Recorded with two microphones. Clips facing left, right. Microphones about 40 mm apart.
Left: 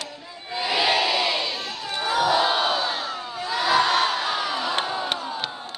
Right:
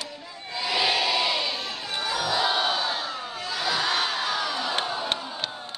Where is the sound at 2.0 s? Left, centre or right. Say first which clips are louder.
Left 6 dB; left.